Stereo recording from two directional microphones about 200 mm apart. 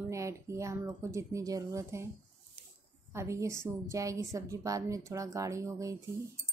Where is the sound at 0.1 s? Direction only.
15° right (ahead or behind).